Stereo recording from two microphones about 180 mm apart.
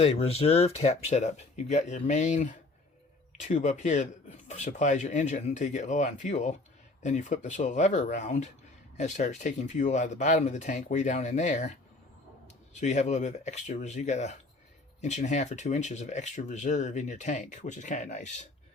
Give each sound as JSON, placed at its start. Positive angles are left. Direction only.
{"t": 0.0, "sound": "speech", "side_deg": 35}